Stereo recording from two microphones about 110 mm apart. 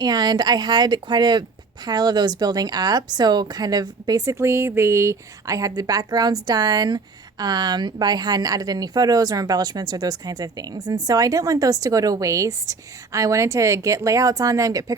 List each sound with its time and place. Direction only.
0.0 s speech: 40° right (ahead or behind)
4.4 s speech: 25° right (ahead or behind)